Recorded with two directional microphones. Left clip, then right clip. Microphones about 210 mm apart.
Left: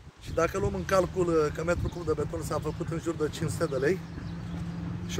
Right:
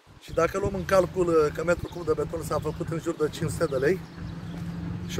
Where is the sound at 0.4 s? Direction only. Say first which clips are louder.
Right 3 dB; 5° left (ahead or behind).